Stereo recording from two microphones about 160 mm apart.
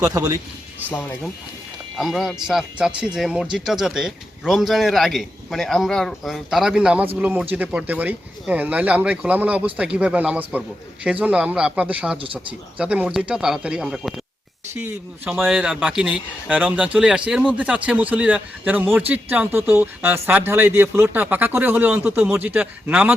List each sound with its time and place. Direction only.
0.0 s a man's voice: 20° right (ahead or behind)
0.9 s speech: 10° left (ahead or behind)
2.0 s a man's voice: centre (ahead or behind)
14.7 s speech: 15° right (ahead or behind)
15.4 s speech: centre (ahead or behind)